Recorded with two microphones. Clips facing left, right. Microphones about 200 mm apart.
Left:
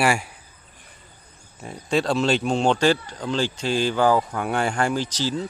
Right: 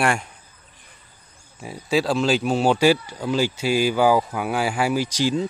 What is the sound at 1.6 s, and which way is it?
Speech, 5° right (ahead or behind).